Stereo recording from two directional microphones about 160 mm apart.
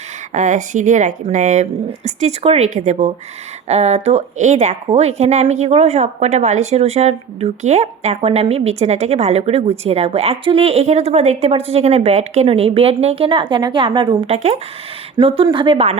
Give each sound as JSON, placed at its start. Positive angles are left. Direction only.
{"t": 0.3, "sound": "speech", "side_deg": -50}
{"t": 2.6, "sound": "a woman's voice", "side_deg": -50}
{"t": 15.2, "sound": "a woman's voice", "side_deg": -30}